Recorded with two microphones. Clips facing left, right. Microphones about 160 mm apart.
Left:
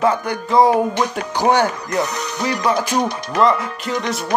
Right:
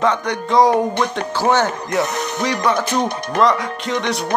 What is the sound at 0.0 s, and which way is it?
Speech, 5° left (ahead or behind).